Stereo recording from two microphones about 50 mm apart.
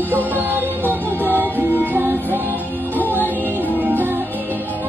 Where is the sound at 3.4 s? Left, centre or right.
Right.